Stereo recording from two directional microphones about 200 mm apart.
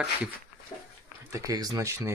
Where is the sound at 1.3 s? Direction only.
15° right (ahead or behind).